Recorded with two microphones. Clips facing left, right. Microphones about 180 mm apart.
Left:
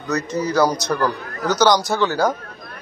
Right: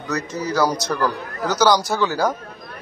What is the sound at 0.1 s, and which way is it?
A man's voice, 5° right (ahead or behind).